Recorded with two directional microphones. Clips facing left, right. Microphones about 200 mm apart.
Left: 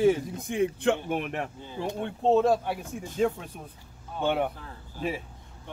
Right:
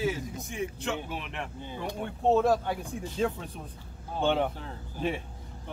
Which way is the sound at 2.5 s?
5° left (ahead or behind).